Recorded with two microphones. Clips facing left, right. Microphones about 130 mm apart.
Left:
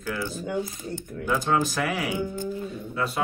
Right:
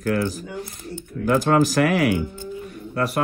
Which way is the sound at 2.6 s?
65° right (ahead or behind).